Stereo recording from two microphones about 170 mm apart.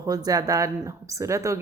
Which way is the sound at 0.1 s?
20° right (ahead or behind).